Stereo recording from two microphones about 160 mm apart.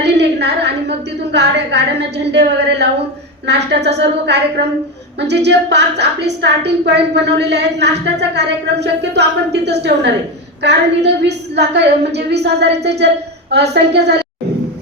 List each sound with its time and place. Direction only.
0.0 s a woman's voice: 90° right